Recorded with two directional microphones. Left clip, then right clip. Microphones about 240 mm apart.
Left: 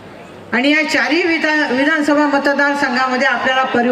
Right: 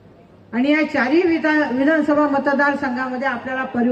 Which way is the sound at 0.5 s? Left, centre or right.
Left.